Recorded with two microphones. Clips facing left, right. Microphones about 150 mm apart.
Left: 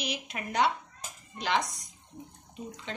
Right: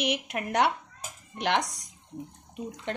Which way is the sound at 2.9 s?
60° right (ahead or behind).